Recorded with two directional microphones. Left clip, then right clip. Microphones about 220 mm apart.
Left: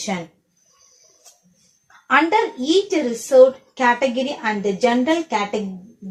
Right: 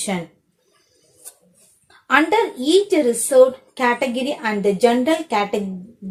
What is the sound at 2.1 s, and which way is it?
A woman's voice, 50° right (ahead or behind).